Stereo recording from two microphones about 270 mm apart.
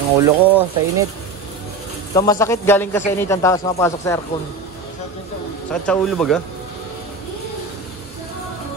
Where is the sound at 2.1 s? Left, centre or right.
Centre.